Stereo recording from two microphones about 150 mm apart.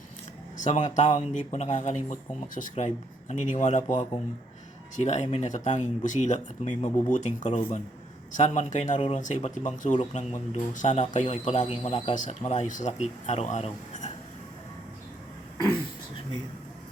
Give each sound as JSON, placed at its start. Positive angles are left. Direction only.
{"t": 0.5, "sound": "speech", "side_deg": 55}
{"t": 9.0, "sound": "speech", "side_deg": 40}
{"t": 9.2, "sound": "speech", "side_deg": 55}